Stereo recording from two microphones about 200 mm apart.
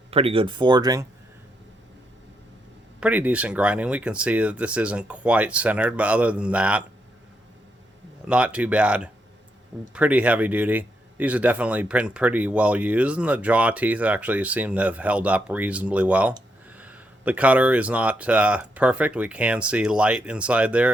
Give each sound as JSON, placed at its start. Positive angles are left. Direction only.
{"t": 0.1, "sound": "speech", "side_deg": -30}
{"t": 3.0, "sound": "speech", "side_deg": -10}
{"t": 8.3, "sound": "speech", "side_deg": -5}